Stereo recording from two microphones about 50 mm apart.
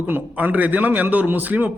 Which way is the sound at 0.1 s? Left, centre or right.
Right.